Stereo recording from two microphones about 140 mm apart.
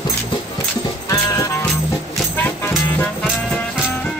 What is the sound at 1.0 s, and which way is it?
Music, 25° left (ahead or behind).